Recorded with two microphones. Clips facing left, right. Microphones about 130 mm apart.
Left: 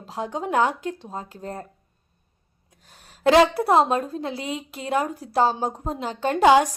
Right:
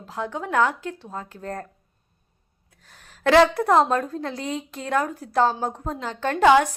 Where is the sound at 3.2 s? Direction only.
20° left (ahead or behind).